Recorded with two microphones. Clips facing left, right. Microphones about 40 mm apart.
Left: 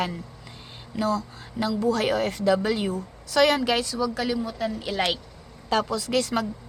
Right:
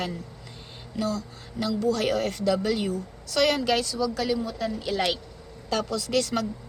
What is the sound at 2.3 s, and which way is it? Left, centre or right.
Speech, centre.